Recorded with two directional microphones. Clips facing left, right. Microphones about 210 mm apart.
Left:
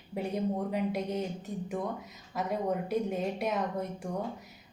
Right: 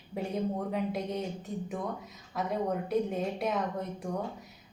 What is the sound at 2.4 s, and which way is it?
A woman's voice, centre (ahead or behind).